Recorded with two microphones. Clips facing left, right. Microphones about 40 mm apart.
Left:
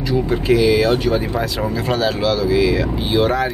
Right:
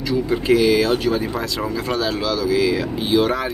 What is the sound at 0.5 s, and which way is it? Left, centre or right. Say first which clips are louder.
Speech: left 1 dB; centre.